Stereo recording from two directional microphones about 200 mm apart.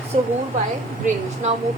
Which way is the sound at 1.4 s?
35° right (ahead or behind).